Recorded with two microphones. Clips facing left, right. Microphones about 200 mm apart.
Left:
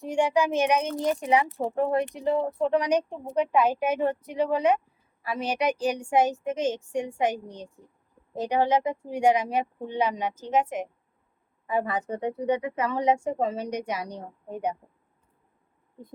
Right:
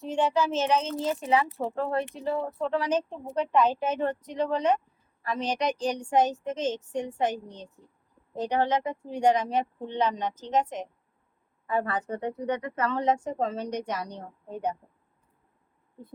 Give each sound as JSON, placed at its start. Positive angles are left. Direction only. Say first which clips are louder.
{"t": 0.0, "sound": "a woman's voice", "louder": "left 2 dB", "side_deg": 10}